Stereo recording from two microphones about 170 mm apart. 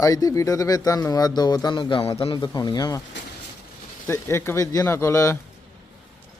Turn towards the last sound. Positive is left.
turn(degrees=15)  # may be behind; listen again after turning